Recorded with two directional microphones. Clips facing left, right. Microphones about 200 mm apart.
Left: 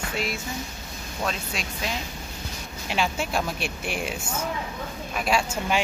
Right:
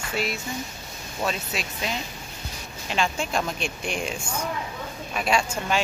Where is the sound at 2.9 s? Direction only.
5° left (ahead or behind).